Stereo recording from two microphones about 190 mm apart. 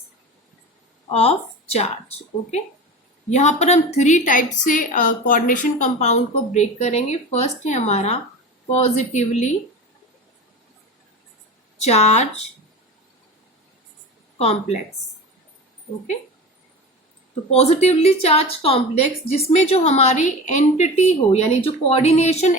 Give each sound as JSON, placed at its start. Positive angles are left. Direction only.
{"t": 1.1, "sound": "speech", "side_deg": 30}
{"t": 3.2, "sound": "speech", "side_deg": 35}
{"t": 11.8, "sound": "speech", "side_deg": 35}
{"t": 14.3, "sound": "speech", "side_deg": 35}
{"t": 17.5, "sound": "speech", "side_deg": 35}